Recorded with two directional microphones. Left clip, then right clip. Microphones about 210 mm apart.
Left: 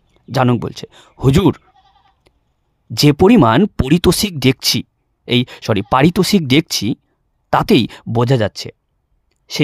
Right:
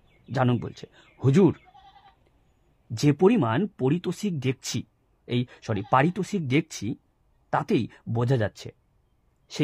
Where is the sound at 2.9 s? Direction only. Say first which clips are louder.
Left 10 dB; 40° left (ahead or behind).